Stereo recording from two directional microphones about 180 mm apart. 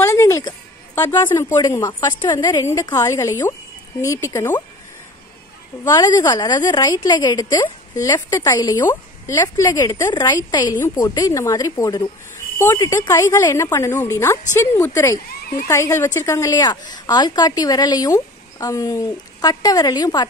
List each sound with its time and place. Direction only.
0.0 s a woman's voice: 15° left (ahead or behind)
5.9 s a woman's voice: 20° left (ahead or behind)